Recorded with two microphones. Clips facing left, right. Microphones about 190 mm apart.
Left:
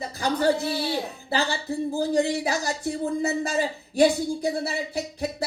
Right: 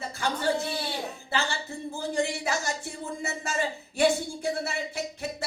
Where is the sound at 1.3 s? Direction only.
35° left (ahead or behind).